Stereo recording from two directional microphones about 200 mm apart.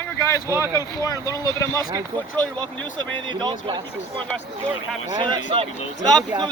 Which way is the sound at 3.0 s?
20° right (ahead or behind).